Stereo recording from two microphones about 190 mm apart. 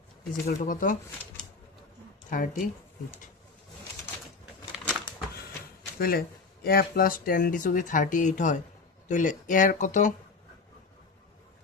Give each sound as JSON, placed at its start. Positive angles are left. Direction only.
{"t": 0.4, "sound": "speech", "side_deg": 45}
{"t": 2.3, "sound": "speech", "side_deg": 45}
{"t": 4.7, "sound": "a sound", "side_deg": -5}
{"t": 6.0, "sound": "speech", "side_deg": 50}